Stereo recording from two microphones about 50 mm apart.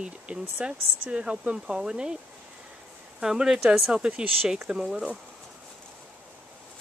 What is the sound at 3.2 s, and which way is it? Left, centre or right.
Speech, centre.